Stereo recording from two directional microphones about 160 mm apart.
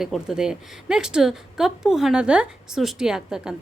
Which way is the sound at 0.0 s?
5° right (ahead or behind).